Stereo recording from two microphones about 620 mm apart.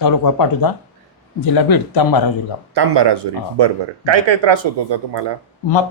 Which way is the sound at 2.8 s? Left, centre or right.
Right.